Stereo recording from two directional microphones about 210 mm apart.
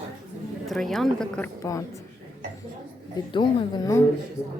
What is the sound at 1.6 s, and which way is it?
Speech, 15° left (ahead or behind).